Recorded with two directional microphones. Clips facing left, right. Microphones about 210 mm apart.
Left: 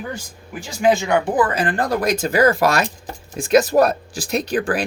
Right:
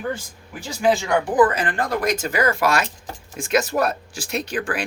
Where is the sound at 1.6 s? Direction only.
35° left (ahead or behind).